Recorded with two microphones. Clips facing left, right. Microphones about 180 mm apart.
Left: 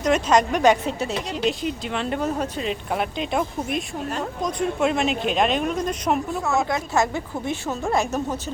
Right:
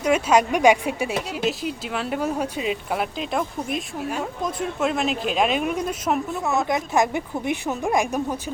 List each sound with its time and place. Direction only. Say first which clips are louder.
0.0 s a woman's voice: even; 10° right (ahead or behind)
6.7 s speech: right 1 dB; 15° right (ahead or behind)